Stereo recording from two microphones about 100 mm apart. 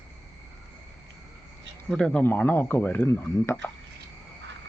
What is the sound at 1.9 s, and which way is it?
Speech, 10° left (ahead or behind).